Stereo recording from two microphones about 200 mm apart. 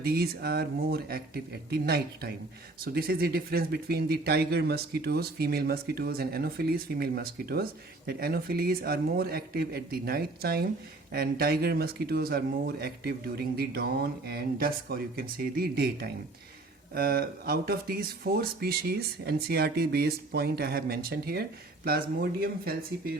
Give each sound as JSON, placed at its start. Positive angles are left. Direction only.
{"t": 0.0, "sound": "speech", "side_deg": -50}